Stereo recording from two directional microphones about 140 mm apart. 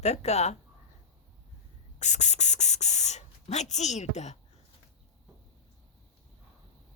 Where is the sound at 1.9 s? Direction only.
55° left (ahead or behind).